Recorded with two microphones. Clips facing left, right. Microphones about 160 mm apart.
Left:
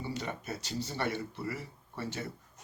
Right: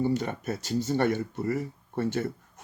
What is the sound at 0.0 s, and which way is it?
Speech, 50° right (ahead or behind).